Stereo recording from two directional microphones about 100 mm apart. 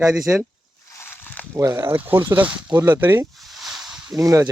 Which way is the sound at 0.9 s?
25° left (ahead or behind).